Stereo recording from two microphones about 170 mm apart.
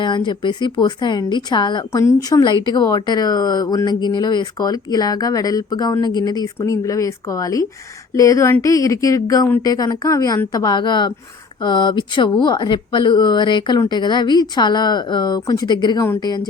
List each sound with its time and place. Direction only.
0.3 s speech: 25° left (ahead or behind)